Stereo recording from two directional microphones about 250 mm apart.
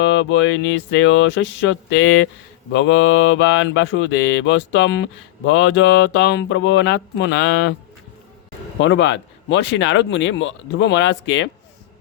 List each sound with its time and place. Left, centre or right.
0.0 s speech: left
8.8 s speech: left